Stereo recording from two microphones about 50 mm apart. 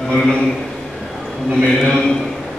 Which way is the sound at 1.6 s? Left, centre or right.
Centre.